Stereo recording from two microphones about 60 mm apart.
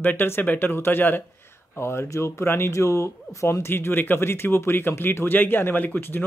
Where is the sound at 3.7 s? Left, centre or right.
Left.